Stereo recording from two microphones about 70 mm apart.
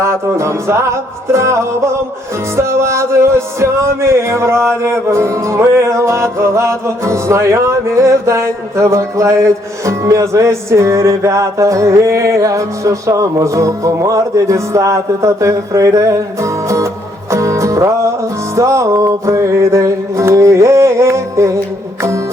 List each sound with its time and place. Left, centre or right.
0.0 s music: right
2.6 s music: right